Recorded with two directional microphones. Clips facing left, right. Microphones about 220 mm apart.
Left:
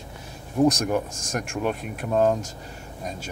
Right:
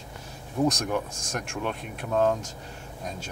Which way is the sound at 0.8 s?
10° left (ahead or behind).